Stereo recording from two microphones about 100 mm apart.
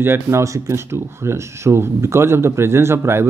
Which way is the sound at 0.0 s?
25° right (ahead or behind).